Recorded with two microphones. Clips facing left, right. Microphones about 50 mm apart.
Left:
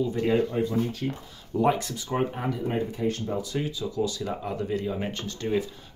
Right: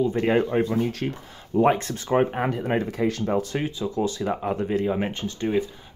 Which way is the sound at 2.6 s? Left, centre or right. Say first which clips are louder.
Right 1 dB; right.